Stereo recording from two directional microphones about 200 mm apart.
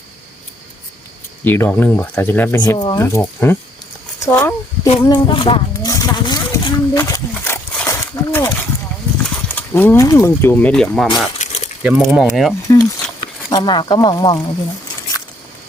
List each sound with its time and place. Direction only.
1.5 s speech: 10° left (ahead or behind)
2.7 s speech: 20° left (ahead or behind)
5.0 s speech: 25° left (ahead or behind); by 11.1 s 5° left (ahead or behind)
11.3 s a sound: 35° left (ahead or behind)
11.8 s speech: 5° right (ahead or behind)
12.6 s speech: 20° left (ahead or behind)